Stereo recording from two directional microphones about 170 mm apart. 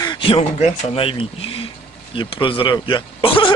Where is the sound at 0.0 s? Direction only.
30° left (ahead or behind).